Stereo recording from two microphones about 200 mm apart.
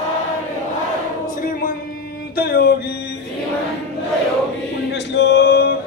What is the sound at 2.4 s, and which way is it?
Music, 50° left (ahead or behind).